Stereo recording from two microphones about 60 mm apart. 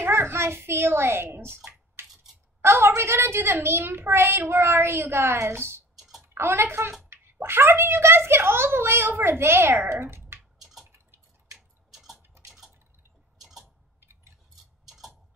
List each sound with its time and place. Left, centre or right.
0.0 s a child's voice: right
2.6 s a woman's voice: right
5.9 s clicking: centre
6.2 s a child's voice: right
10.6 s a sound: centre
11.5 s tick-tock: centre
12.4 s dishes: centre
13.4 s a sound: centre
14.9 s tick-tock: centre